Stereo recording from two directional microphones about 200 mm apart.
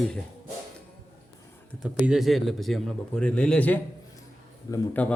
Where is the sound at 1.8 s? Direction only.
Centre (ahead or behind).